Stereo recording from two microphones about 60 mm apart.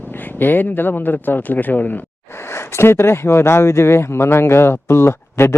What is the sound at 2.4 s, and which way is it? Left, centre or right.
Speech, left.